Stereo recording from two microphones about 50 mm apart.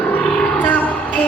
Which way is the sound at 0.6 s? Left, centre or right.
Left.